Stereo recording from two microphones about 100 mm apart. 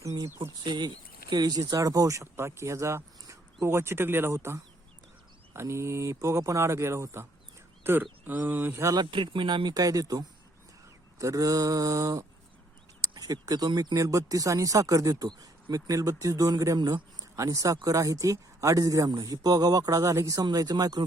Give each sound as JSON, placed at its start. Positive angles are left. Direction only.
{"t": 0.0, "sound": "speech", "side_deg": -30}
{"t": 0.6, "sound": "speech", "side_deg": -50}
{"t": 9.0, "sound": "speech", "side_deg": -55}